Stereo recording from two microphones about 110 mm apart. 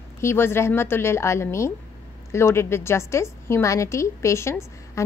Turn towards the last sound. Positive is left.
turn(degrees=25)  # may be behind; listen again after turning